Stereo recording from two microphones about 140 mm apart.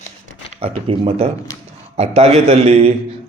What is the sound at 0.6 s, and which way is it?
A man's voice, 45° right (ahead or behind).